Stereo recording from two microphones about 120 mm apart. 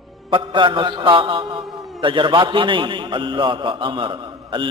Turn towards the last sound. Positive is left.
turn(degrees=-40)  # may be behind; listen again after turning